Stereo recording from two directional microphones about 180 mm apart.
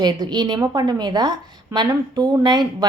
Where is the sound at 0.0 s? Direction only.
25° right (ahead or behind).